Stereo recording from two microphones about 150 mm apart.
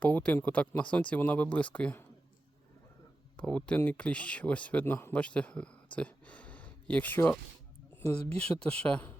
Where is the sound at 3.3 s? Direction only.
10° left (ahead or behind).